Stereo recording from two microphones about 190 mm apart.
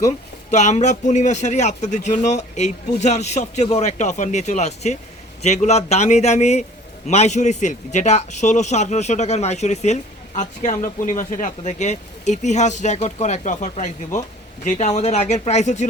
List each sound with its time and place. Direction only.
0.5 s speech: 40° left (ahead or behind)